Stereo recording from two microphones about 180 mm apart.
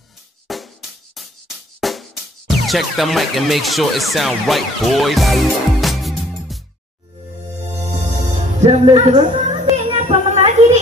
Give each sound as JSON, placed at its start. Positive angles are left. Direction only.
{"t": 0.5, "sound": "music", "side_deg": 0}
{"t": 1.8, "sound": "music", "side_deg": 0}
{"t": 2.6, "sound": "speech", "side_deg": 0}
{"t": 8.6, "sound": "music", "side_deg": -35}